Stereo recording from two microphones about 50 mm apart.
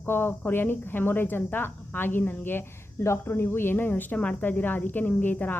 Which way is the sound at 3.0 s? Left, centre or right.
Left.